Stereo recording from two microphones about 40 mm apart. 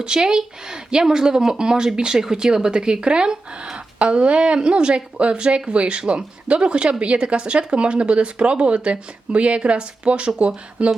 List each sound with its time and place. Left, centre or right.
0.0 s a woman's voice: centre